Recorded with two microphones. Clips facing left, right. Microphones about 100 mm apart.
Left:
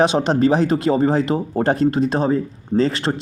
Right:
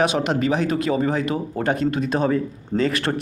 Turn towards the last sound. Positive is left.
turn(degrees=25)  # may be behind; listen again after turning